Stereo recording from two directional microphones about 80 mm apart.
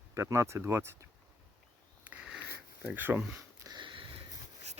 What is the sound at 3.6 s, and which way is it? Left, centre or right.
Sniff, right.